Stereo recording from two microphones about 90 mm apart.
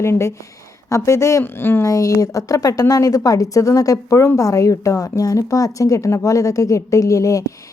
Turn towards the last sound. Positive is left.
turn(degrees=35)  # may be behind; listen again after turning